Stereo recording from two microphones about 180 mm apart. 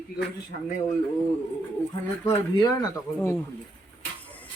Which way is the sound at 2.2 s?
25° left (ahead or behind).